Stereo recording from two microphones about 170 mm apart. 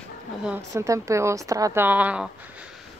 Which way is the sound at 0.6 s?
20° right (ahead or behind).